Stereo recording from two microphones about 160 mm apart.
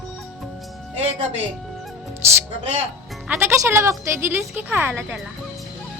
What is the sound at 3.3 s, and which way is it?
Speech, 15° right (ahead or behind).